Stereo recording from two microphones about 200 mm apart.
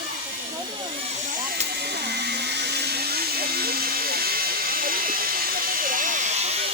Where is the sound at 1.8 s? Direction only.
55° right (ahead or behind); by 6.6 s 35° right (ahead or behind).